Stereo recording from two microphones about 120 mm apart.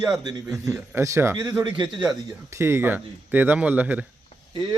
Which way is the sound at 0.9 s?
25° right (ahead or behind).